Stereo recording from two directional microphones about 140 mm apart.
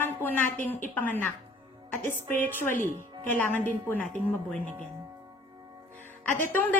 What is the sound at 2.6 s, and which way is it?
Speech, 70° left (ahead or behind).